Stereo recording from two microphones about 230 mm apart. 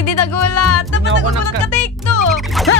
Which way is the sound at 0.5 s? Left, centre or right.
Left.